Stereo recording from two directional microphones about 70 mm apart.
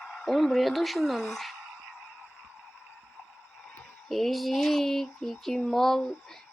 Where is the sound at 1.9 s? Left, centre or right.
Centre.